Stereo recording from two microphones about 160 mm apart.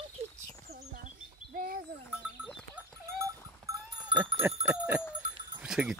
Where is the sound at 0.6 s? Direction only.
70° right (ahead or behind).